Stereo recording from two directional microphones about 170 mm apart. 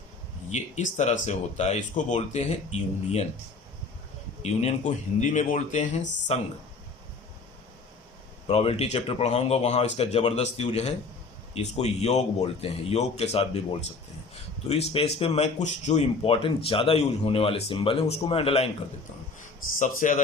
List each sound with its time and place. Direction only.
0.5 s speech: 45° left (ahead or behind)
4.4 s speech: 45° left (ahead or behind)
8.4 s speech: 35° left (ahead or behind)
14.7 s speech: 35° left (ahead or behind)
19.8 s speech: 50° left (ahead or behind)